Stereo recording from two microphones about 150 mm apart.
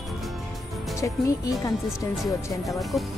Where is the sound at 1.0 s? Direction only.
20° left (ahead or behind).